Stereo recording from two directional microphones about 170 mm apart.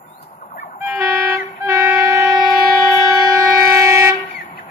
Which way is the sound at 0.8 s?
10° right (ahead or behind).